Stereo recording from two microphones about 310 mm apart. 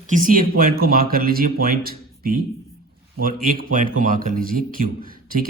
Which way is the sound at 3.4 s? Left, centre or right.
Right.